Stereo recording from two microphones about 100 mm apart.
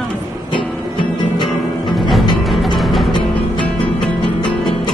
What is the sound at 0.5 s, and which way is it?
Music, 55° left (ahead or behind).